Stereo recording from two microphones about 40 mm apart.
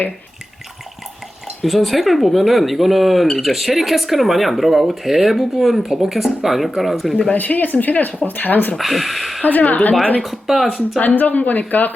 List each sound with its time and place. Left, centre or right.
1.6 s speech: centre
7.3 s speech: left
8.8 s speech: centre
9.4 s speech: left
10.2 s speech: centre
11.0 s speech: left